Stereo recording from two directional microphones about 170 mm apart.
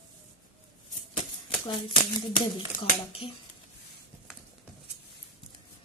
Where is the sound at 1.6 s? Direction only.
30° left (ahead or behind).